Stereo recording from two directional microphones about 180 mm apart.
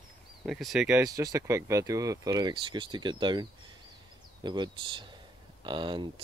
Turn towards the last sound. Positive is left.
turn(degrees=-25)  # may be behind; listen again after turning